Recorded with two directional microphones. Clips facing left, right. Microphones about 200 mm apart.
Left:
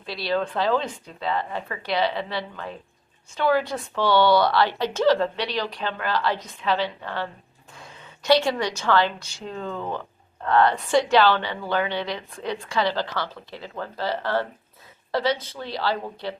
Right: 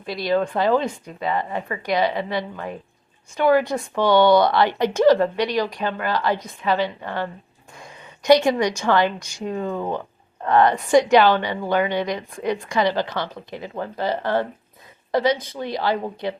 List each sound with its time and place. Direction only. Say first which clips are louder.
0.1 s a woman's voice: right 4 dB; 15° right (ahead or behind)